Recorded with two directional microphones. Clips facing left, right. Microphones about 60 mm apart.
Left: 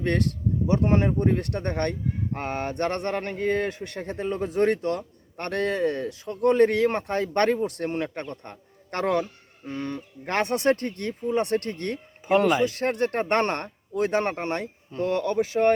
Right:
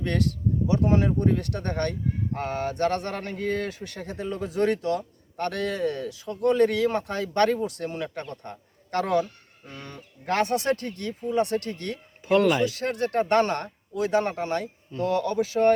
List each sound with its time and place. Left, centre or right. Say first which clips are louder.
0.0 s speech: left 1 dB; left
12.2 s speech: even; left
12.6 s speech: left 2 dB; left
14.6 s speech: even; left